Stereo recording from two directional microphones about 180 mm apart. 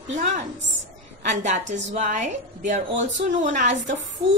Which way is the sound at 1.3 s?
40° right (ahead or behind).